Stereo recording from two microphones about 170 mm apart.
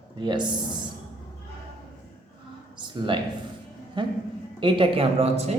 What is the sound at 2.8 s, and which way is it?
Speech, 30° right (ahead or behind).